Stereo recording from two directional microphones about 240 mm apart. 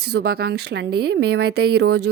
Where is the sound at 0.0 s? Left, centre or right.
Right.